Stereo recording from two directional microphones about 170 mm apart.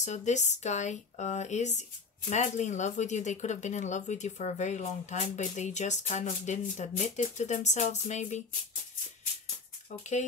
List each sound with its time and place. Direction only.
0.0 s speech: 45° left (ahead or behind)
9.8 s speech: 45° left (ahead or behind)